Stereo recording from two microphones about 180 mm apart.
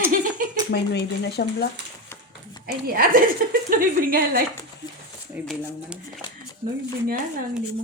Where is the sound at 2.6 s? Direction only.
55° right (ahead or behind).